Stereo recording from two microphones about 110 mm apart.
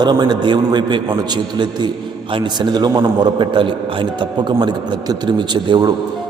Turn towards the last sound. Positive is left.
turn(degrees=-40)  # may be behind; listen again after turning